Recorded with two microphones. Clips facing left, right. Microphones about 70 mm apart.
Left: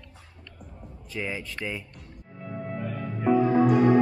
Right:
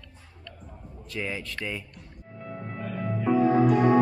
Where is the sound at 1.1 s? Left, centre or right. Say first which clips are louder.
Even; centre.